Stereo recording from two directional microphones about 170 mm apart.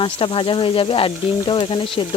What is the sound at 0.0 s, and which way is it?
Speech, 30° left (ahead or behind).